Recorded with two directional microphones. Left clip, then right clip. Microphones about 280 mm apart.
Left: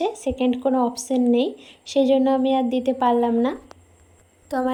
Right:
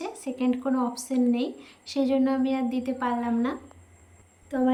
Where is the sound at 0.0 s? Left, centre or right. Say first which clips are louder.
Left 8 dB; centre.